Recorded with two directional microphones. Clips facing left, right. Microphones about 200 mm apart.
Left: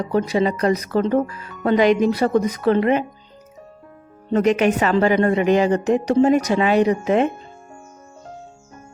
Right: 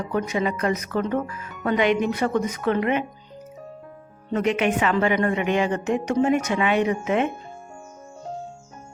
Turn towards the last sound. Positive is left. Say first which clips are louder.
# left 5 dB
turn(degrees=35)  # may be behind; listen again after turning